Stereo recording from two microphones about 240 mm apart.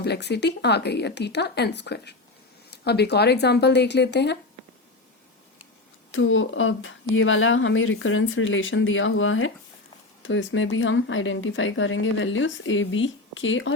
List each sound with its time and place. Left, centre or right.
0.0 s speech: left
6.1 s speech: left